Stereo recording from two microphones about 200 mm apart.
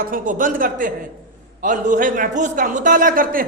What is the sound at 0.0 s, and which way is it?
A man's voice, 45° right (ahead or behind).